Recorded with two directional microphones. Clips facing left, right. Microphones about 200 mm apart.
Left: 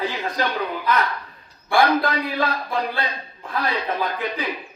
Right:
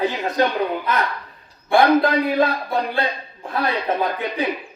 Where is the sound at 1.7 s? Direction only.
25° right (ahead or behind).